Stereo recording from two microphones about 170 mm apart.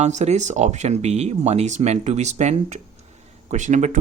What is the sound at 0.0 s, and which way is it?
Speech, 45° right (ahead or behind).